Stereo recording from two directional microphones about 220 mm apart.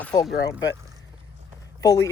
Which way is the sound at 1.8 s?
15° left (ahead or behind).